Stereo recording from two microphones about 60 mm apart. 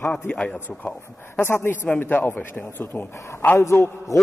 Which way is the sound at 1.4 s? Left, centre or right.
Left.